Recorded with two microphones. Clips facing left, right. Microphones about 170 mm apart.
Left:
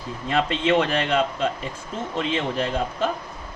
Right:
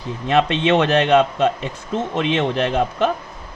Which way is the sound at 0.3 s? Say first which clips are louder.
Right 5 dB; 75° right (ahead or behind).